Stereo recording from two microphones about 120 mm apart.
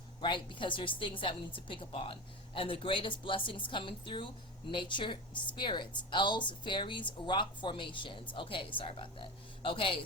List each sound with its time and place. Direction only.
0.2 s a woman's voice: 40° left (ahead or behind)